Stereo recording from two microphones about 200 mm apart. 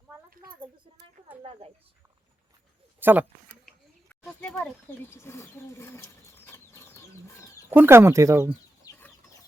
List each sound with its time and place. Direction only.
0.5 s speech: 20° right (ahead or behind)
3.0 s speech: 10° right (ahead or behind)
3.7 s a sound: 5° left (ahead or behind)
7.7 s speech: 10° right (ahead or behind)
8.8 s chicken: 10° left (ahead or behind)